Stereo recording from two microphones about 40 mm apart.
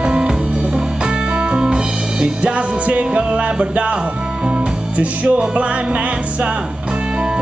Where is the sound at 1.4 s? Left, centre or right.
Centre.